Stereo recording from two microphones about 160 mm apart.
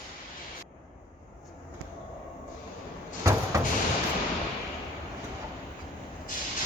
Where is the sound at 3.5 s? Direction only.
20° right (ahead or behind).